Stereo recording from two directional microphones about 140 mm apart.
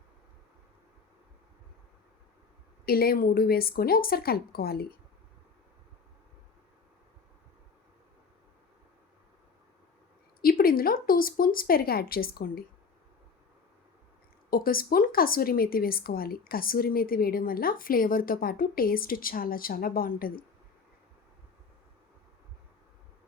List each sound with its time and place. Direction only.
2.8 s a woman's voice: 90° left
10.4 s a woman's voice: 90° left
14.5 s a woman's voice: 90° left